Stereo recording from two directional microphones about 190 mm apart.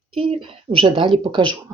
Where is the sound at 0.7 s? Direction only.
25° right (ahead or behind).